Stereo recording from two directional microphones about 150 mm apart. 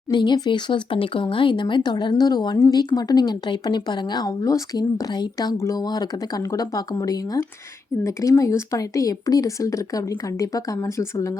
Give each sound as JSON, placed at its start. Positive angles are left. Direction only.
{"t": 0.1, "sound": "speech", "side_deg": 30}